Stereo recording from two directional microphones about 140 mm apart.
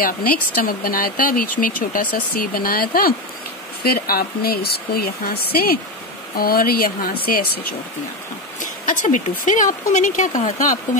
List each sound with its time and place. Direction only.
0.0 s speech: 90° left
8.5 s speech: 65° left (ahead or behind)